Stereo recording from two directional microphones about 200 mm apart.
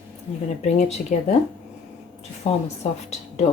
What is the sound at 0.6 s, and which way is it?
Speech, 35° left (ahead or behind).